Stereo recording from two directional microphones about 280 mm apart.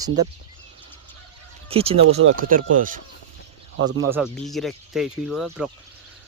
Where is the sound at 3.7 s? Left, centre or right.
Right.